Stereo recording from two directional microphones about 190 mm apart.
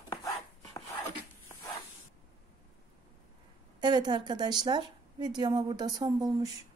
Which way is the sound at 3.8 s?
25° right (ahead or behind).